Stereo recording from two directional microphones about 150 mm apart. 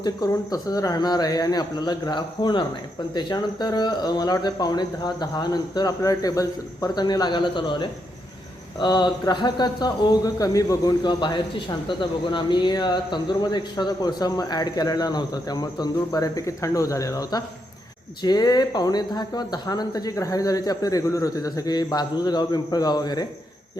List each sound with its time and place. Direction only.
0.0 s speech: 25° left (ahead or behind)